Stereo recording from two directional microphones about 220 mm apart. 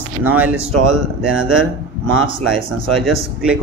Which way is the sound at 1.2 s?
65° right (ahead or behind).